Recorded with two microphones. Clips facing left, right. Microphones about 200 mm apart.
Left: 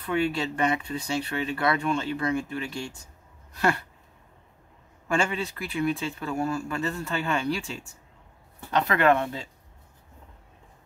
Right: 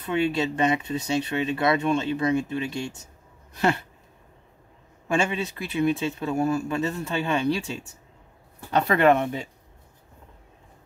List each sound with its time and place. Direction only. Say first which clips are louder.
0.0 s speech: right 2 dB; 20° right (ahead or behind)
5.0 s speech: right 2 dB; 20° right (ahead or behind)
8.8 s speech: right 3 dB; 25° right (ahead or behind)